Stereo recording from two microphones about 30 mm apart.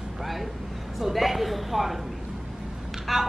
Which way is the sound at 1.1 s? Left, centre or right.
Centre.